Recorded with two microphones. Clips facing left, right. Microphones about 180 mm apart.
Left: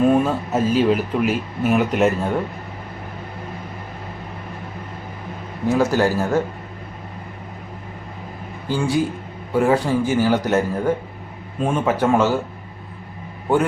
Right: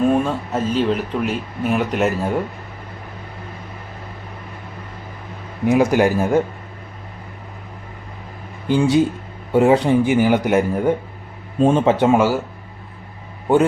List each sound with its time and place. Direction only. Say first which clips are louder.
0.0 s speech: left 1 dB; 5° left (ahead or behind)
5.6 s speech: right 3 dB; 15° right (ahead or behind)
8.6 s speech: right 5 dB; 20° right (ahead or behind)